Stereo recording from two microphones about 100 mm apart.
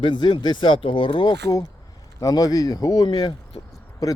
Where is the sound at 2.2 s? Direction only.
35° left (ahead or behind).